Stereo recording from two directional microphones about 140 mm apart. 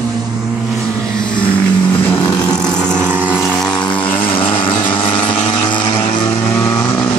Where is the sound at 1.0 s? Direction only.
5° left (ahead or behind).